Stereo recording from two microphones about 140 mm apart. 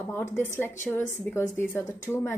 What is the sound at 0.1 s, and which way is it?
A woman's voice, 15° left (ahead or behind).